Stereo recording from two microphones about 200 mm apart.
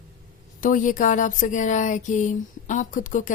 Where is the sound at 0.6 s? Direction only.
40° left (ahead or behind).